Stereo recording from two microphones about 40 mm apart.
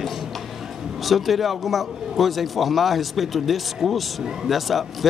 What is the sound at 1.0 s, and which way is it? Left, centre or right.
Speech, centre.